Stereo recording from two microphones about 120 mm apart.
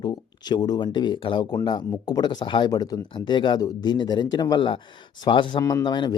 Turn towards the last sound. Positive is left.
turn(degrees=40)  # may be behind; listen again after turning